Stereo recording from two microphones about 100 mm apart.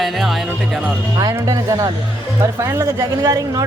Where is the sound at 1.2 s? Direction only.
40° right (ahead or behind).